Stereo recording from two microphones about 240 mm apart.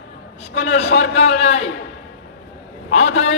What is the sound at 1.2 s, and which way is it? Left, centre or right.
Speech, left.